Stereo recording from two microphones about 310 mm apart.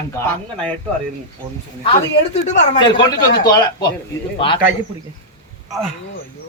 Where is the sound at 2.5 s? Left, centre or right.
Centre.